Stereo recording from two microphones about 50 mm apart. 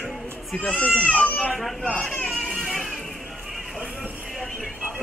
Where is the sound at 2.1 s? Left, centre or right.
Left.